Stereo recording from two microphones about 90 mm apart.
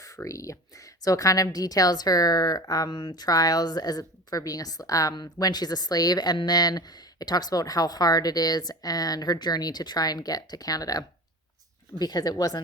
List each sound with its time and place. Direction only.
0.0 s speech: 35° left (ahead or behind)
5.1 s speech: 55° left (ahead or behind)